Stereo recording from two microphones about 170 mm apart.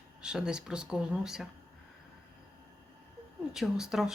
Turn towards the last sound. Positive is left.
turn(degrees=-5)  # may be behind; listen again after turning